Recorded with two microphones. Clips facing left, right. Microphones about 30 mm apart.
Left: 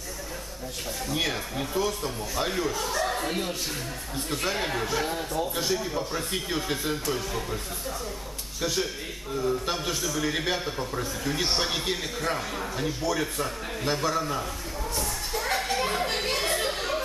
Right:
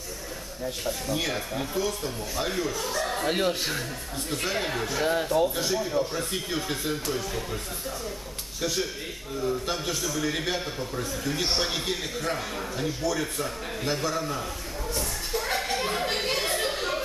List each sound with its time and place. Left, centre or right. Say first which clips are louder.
1.0 s speech: left 3 dB; centre
3.3 s speech: right 4 dB; right
4.3 s speech: even; centre
5.1 s speech: right 6 dB; right
5.6 s speech: right 2 dB; centre
8.5 s a man's voice: even; centre
15.0 s a sound: right 1 dB; centre